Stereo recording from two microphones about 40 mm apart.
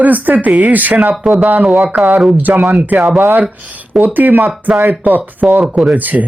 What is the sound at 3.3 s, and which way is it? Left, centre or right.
Speech, right.